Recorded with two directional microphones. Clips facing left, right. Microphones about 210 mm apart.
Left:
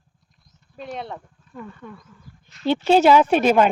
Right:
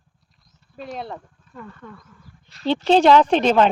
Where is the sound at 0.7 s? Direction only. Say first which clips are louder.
Even; centre (ahead or behind).